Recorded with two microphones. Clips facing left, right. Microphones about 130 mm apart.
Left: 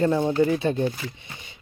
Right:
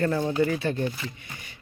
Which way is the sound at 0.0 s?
20° left (ahead or behind).